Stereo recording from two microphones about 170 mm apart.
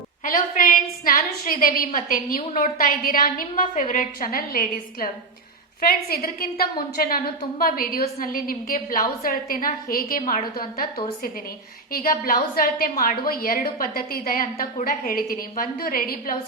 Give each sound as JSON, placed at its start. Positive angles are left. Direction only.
{"t": 0.3, "sound": "a woman's voice", "side_deg": 55}